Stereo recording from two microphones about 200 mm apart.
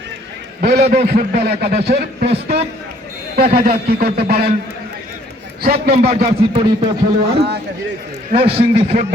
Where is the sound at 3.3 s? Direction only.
50° right (ahead or behind).